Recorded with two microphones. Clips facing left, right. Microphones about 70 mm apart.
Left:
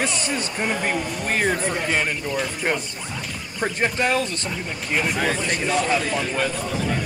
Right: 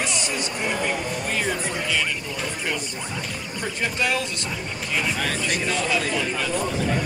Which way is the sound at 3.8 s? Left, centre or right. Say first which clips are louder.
Left 3 dB; left.